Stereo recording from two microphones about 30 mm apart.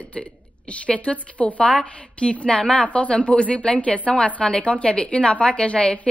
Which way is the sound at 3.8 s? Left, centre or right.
Left.